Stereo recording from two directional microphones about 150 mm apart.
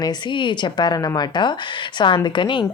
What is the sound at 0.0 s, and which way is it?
A woman's voice, 30° left (ahead or behind).